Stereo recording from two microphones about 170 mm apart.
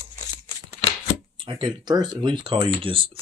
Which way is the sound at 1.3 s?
30° right (ahead or behind).